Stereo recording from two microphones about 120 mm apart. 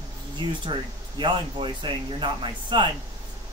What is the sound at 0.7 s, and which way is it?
Speech, 45° right (ahead or behind).